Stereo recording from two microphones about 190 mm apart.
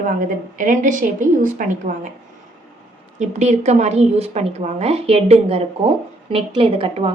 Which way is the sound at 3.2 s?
35° right (ahead or behind).